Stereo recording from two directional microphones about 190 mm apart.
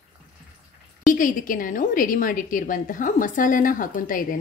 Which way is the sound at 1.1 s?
45° left (ahead or behind).